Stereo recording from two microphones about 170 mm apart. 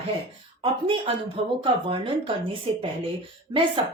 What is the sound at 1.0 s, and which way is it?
A woman's voice, 30° right (ahead or behind).